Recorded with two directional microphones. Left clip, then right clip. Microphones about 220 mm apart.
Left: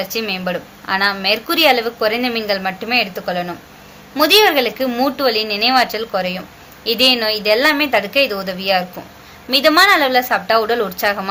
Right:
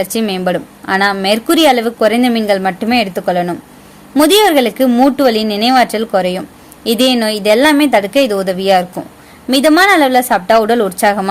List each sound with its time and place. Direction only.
0.0 s a woman's voice: 50° right (ahead or behind)